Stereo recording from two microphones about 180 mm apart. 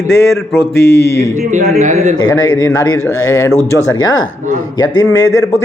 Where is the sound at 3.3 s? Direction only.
20° left (ahead or behind).